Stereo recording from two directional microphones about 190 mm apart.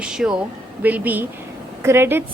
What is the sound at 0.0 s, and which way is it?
A woman's voice, 5° right (ahead or behind).